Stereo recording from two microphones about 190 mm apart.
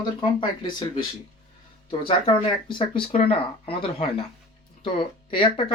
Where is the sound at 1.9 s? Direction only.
30° left (ahead or behind).